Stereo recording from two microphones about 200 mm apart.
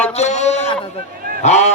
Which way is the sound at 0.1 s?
35° left (ahead or behind).